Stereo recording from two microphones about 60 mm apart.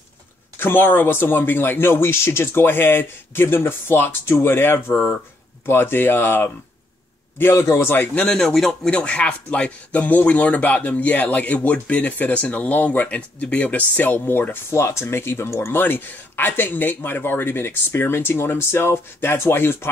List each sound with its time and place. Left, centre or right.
0.6 s speech: left
7.4 s speech: left
8.3 s speech: centre
8.9 s speech: centre; by 14.8 s left
14.8 s speech: left
15.8 s speech: left